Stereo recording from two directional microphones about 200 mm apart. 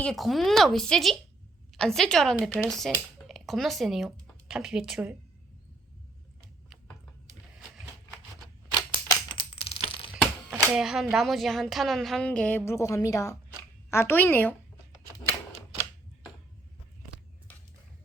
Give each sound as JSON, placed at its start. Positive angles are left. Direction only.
{"t": 0.0, "sound": "a woman's voice", "side_deg": 0}
{"t": 6.7, "sound": "a sound", "side_deg": 5}
{"t": 9.0, "sound": "typing", "side_deg": 25}
{"t": 10.5, "sound": "a woman's voice", "side_deg": 0}